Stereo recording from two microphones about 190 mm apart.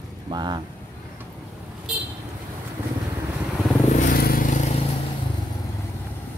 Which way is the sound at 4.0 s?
50° left (ahead or behind).